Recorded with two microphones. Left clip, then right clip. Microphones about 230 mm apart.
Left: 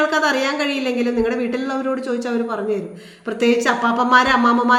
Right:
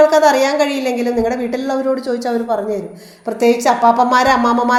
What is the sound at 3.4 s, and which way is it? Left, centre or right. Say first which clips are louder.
A woman's voice: right 5 dB; centre.